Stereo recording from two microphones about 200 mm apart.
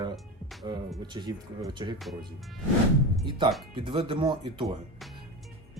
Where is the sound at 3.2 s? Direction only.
25° right (ahead or behind).